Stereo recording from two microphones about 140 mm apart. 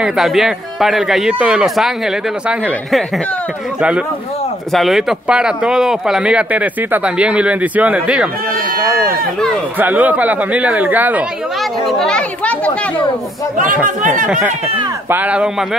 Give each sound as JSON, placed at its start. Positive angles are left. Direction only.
{"t": 0.0, "sound": "speech", "side_deg": 0}
{"t": 4.7, "sound": "speech", "side_deg": 0}
{"t": 9.8, "sound": "speech", "side_deg": -10}
{"t": 12.0, "sound": "a child's voice", "side_deg": 5}
{"t": 13.8, "sound": "speech", "side_deg": -70}
{"t": 15.0, "sound": "speech", "side_deg": -10}